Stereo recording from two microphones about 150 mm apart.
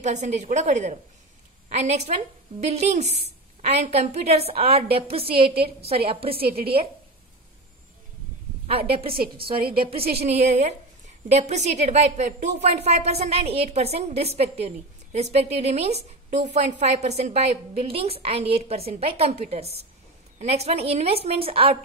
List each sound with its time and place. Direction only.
0.0 s a woman's voice: 50° right (ahead or behind)
8.6 s a woman's voice: 40° right (ahead or behind)
9.1 s a woman's voice: 80° right
9.8 s a woman's voice: 40° right (ahead or behind)